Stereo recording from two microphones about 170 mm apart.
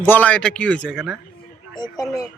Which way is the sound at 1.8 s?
20° left (ahead or behind).